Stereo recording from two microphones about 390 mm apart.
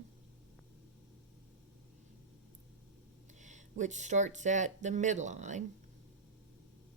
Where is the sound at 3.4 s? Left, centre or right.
Centre.